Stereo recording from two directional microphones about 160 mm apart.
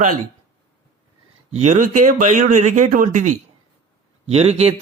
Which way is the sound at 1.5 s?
45° right (ahead or behind).